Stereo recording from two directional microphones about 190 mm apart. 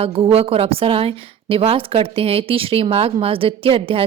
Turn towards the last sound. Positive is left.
turn(degrees=-30)  # may be behind; listen again after turning